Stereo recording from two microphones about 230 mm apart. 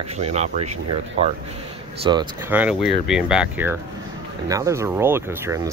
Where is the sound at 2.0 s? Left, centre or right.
Centre.